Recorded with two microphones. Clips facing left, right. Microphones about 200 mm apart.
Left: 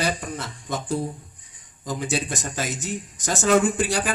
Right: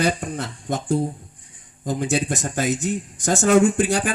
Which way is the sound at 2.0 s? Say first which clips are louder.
Right 4 dB; 50° right (ahead or behind).